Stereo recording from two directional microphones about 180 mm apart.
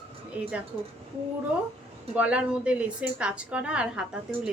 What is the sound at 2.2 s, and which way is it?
A woman's voice, 5° right (ahead or behind).